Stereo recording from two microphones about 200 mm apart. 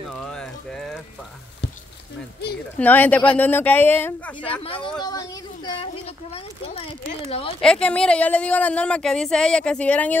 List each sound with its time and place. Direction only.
0.1 s a sound: centre (ahead or behind)
2.5 s speech: 50° left (ahead or behind)
2.8 s speech: 10° left (ahead or behind)
5.0 s a sound: 20° left (ahead or behind)
7.2 s speech: 30° left (ahead or behind)
7.6 s speech: 5° left (ahead or behind)